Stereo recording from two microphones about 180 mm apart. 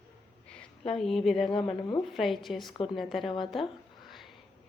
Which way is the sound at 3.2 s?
30° left (ahead or behind).